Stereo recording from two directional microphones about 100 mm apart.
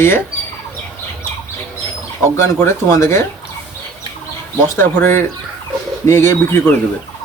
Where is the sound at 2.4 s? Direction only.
30° left (ahead or behind).